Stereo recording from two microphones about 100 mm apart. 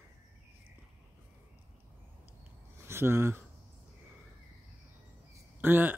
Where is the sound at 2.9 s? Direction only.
25° right (ahead or behind).